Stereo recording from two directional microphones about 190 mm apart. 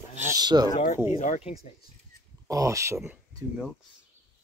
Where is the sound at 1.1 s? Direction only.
40° left (ahead or behind).